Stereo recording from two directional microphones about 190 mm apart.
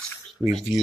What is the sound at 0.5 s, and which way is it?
Speech, centre (ahead or behind).